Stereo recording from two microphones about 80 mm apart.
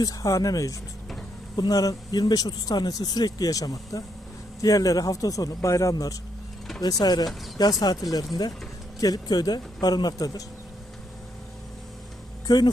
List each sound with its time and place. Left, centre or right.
0.0 s a man's voice: left
9.0 s speech: left
12.5 s speech: left